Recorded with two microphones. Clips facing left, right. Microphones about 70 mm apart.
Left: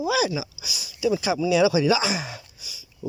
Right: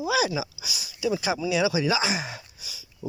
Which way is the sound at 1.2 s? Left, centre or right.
Right.